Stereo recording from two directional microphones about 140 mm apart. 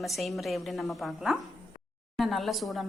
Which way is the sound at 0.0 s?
Centre (ahead or behind).